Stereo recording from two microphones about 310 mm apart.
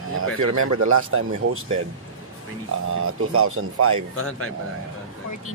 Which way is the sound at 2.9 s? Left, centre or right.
Right.